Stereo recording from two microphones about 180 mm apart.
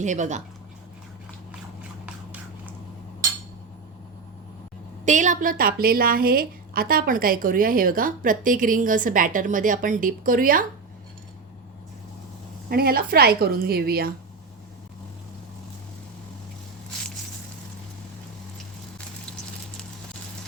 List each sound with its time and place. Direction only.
0.0 s speech: 40° right (ahead or behind)
2.0 s a sound: 10° right (ahead or behind)
5.0 s a woman's voice: 45° right (ahead or behind)
12.6 s a woman's voice: 55° right (ahead or behind)